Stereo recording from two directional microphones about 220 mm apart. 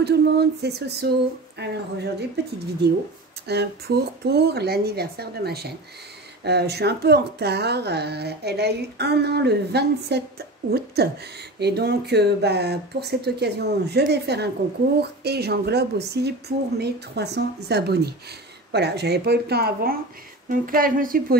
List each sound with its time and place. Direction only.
0.0 s speech: 50° right (ahead or behind)